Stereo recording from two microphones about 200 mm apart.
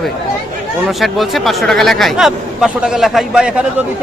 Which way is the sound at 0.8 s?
Centre (ahead or behind).